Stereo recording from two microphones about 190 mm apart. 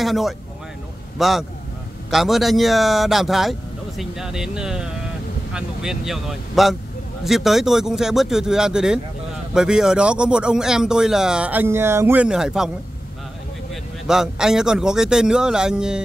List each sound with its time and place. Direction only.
0.0 s speech: centre (ahead or behind)
14.0 s speech: 5° right (ahead or behind)